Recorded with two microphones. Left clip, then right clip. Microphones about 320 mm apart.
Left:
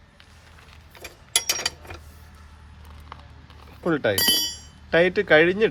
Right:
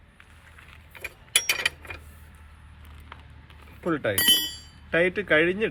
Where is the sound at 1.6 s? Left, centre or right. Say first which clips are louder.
Right 1 dB; centre.